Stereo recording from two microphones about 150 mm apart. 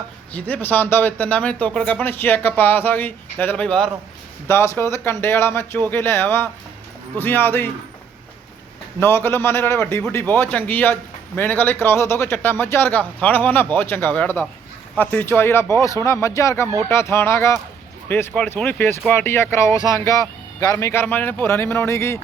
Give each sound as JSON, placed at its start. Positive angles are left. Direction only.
{"t": 0.3, "sound": "speech", "side_deg": 10}
{"t": 9.0, "sound": "speech", "side_deg": 15}